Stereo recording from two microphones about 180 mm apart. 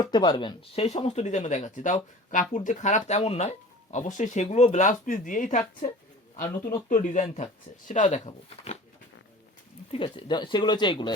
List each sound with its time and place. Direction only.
0.0 s speech: 20° left (ahead or behind)
9.9 s speech: 30° left (ahead or behind)